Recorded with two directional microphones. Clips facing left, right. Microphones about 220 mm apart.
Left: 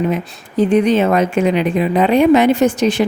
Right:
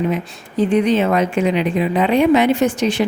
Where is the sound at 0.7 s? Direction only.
45° left (ahead or behind).